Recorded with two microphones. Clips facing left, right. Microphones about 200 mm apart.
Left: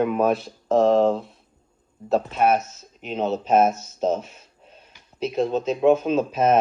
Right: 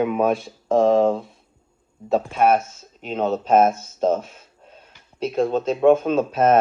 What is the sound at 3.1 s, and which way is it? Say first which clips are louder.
Speech: right 2 dB; 5° left (ahead or behind).